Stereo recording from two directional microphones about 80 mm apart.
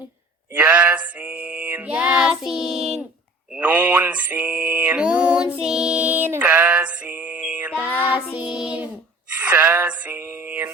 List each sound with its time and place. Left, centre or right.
0.5 s mantra: right
3.6 s mantra: right
9.5 s music: right